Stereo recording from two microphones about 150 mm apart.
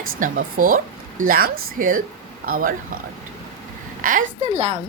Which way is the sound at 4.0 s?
65° right (ahead or behind).